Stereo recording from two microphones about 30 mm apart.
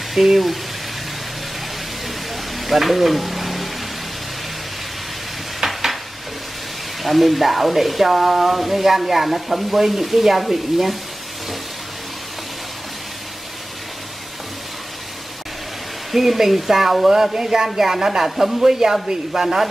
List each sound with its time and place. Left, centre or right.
0.1 s speech: centre
2.6 s frying: centre
5.6 s a sound: centre
7.0 s speech: centre
16.1 s speech: centre